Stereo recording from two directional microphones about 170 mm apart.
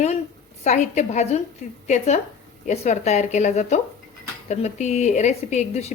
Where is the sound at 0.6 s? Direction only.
45° left (ahead or behind).